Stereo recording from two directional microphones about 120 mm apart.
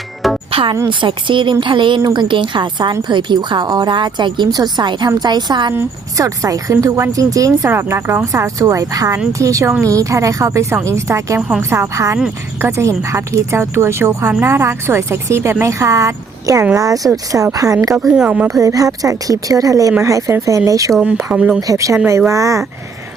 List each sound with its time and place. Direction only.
0.5 s a woman's voice: 45° right (ahead or behind); by 11.3 s 25° right (ahead or behind)
11.3 s speech: 10° right (ahead or behind)
11.7 s speech: 25° right (ahead or behind)
12.1 s speech: 15° right (ahead or behind)
13.0 s speech: 25° right (ahead or behind)
18.1 s speech: 10° right (ahead or behind)
18.6 s speech: 30° right (ahead or behind)
21.2 s speech: 10° right (ahead or behind)
21.7 s speech: 25° right (ahead or behind)